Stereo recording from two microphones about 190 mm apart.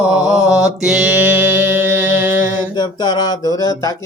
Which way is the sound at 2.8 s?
20° left (ahead or behind).